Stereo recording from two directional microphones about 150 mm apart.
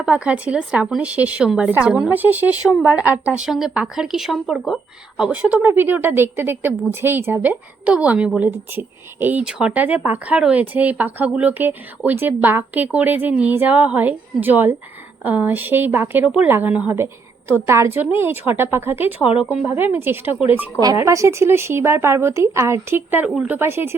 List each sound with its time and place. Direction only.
0.0 s a woman's voice: 10° right (ahead or behind)